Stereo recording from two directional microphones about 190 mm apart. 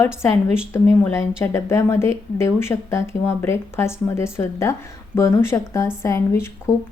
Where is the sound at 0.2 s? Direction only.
15° left (ahead or behind).